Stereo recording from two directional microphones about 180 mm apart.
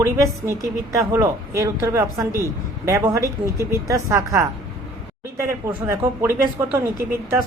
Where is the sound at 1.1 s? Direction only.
15° right (ahead or behind).